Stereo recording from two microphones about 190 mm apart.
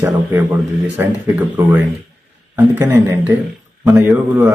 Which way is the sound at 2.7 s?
10° right (ahead or behind).